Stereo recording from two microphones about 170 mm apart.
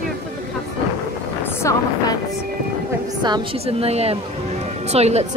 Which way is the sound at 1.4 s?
15° left (ahead or behind).